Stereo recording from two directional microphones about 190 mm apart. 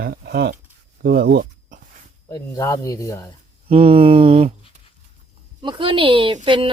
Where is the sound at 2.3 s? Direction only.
15° left (ahead or behind).